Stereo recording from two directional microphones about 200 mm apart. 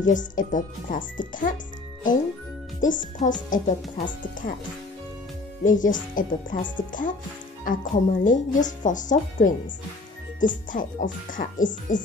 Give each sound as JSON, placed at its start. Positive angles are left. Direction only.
{"t": 0.0, "sound": "speech", "side_deg": 40}
{"t": 2.8, "sound": "speech", "side_deg": 40}
{"t": 5.6, "sound": "speech", "side_deg": 40}